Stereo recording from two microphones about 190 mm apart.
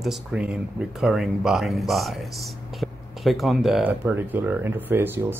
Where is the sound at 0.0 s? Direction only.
5° right (ahead or behind).